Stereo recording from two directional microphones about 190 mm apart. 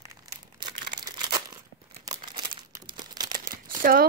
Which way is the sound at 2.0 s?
20° right (ahead or behind).